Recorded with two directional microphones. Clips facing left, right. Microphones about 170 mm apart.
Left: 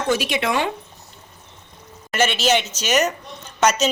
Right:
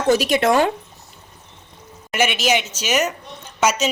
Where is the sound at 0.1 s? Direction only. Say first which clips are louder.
Right 6 dB; 40° right (ahead or behind).